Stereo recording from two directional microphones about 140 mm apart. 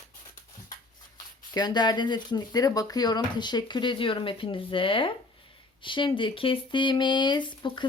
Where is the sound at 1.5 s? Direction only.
30° left (ahead or behind).